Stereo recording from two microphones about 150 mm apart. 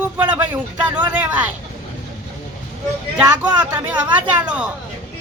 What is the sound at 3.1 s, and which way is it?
Speech, 10° right (ahead or behind).